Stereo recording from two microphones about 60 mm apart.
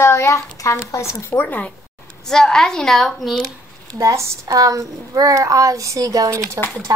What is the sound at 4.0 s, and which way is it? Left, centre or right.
A child's voice, right.